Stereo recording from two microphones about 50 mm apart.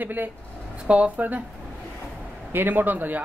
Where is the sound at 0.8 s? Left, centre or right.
Right.